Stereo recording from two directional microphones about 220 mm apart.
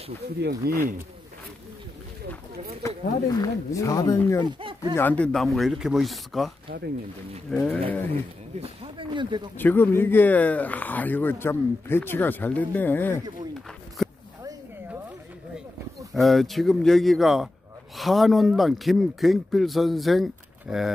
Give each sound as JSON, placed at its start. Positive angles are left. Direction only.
{"t": 0.4, "sound": "speech", "side_deg": -45}
{"t": 2.8, "sound": "speech", "side_deg": 15}
{"t": 4.5, "sound": "speech", "side_deg": -20}
{"t": 4.9, "sound": "speech", "side_deg": 5}
{"t": 7.5, "sound": "speech", "side_deg": 0}
{"t": 8.5, "sound": "speech", "side_deg": -20}
{"t": 9.6, "sound": "speech", "side_deg": 10}
{"t": 14.0, "sound": "a sound", "side_deg": 0}
{"t": 16.1, "sound": "speech", "side_deg": 0}